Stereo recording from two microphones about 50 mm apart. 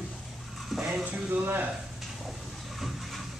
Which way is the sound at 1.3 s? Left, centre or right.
Right.